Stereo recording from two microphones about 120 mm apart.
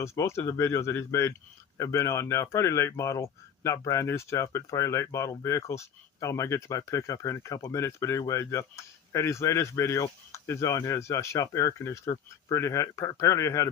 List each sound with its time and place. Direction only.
0.0 s speech: 25° left (ahead or behind)